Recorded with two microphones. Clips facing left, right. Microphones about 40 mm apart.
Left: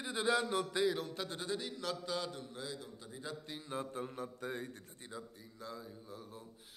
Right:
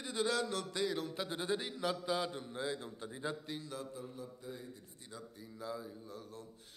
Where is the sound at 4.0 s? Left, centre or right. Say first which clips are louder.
Left 5 dB; left.